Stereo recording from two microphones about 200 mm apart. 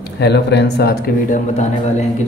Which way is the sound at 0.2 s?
60° left (ahead or behind).